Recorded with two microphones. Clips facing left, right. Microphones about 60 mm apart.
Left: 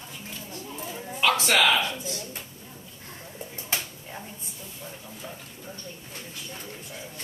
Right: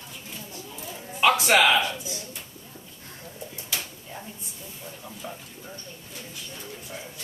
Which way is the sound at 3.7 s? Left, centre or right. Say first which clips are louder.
Left 2 dB; left.